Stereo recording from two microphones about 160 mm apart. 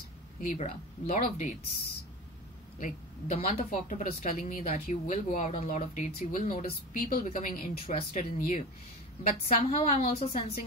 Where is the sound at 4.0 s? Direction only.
55° left (ahead or behind).